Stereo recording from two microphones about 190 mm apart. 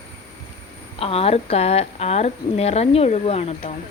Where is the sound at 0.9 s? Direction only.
30° left (ahead or behind).